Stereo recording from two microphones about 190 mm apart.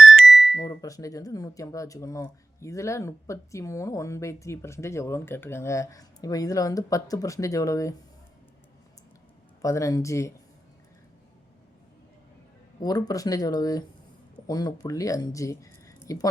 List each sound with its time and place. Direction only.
0.0 s a sound: centre (ahead or behind)
0.6 s speech: 20° left (ahead or behind)
9.6 s speech: 15° left (ahead or behind)
12.8 s speech: 20° left (ahead or behind)